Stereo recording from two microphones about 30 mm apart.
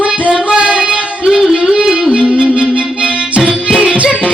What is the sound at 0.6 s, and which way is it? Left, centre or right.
Child singing, right.